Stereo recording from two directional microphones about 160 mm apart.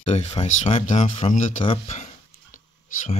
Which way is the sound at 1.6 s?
35° left (ahead or behind).